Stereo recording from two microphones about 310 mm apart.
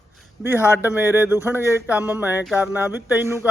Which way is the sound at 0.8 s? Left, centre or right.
Centre.